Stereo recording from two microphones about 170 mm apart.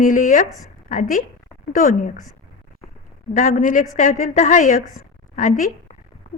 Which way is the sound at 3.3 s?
50° left (ahead or behind).